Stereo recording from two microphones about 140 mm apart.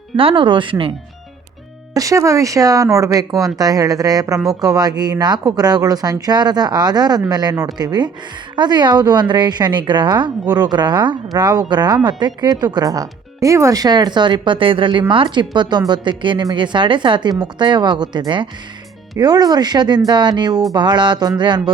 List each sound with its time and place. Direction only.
0.2 s speech: 40° right (ahead or behind)
1.9 s speech: 25° right (ahead or behind)